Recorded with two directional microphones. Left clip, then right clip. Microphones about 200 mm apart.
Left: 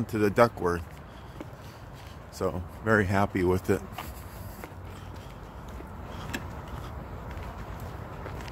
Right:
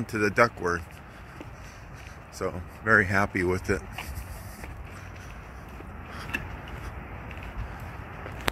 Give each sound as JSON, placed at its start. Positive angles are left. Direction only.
{"t": 0.0, "sound": "speech", "side_deg": 15}
{"t": 2.3, "sound": "speech", "side_deg": 20}